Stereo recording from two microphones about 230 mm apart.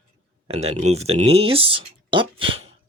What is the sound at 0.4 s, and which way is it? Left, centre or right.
Speech, right.